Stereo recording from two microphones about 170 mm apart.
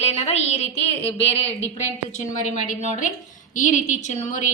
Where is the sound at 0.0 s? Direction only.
40° left (ahead or behind).